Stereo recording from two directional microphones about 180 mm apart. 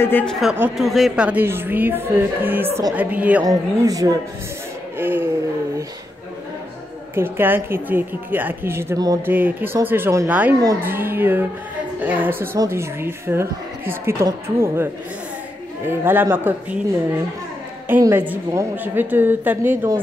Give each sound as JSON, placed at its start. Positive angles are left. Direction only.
{"t": 0.0, "sound": "a man's voice", "side_deg": 10}
{"t": 0.4, "sound": "a woman's voice", "side_deg": 0}
{"t": 3.4, "sound": "speech", "side_deg": -20}
{"t": 7.2, "sound": "a woman's voice", "side_deg": -10}
{"t": 15.9, "sound": "a woman's voice", "side_deg": -10}
{"t": 17.8, "sound": "a woman's voice", "side_deg": -10}